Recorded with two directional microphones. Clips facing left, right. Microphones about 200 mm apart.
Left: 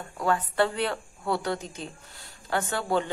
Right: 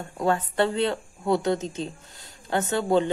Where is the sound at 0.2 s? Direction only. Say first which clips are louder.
Right 2 dB; 25° right (ahead or behind).